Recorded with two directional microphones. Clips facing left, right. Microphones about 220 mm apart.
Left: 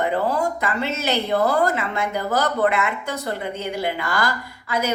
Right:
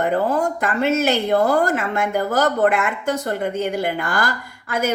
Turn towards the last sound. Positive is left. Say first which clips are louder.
# right 2 dB
turn(degrees=-50)  # may be behind; listen again after turning